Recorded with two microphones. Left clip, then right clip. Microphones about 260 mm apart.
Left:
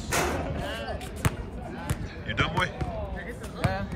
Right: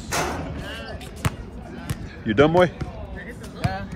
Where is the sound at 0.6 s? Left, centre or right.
Left.